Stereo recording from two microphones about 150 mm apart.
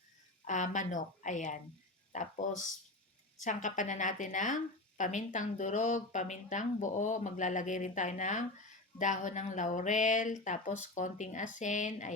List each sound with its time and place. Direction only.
0.4 s a woman's voice: 55° left (ahead or behind)